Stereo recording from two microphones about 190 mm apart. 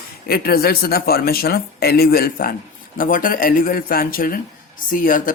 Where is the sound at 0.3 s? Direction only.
50° left (ahead or behind).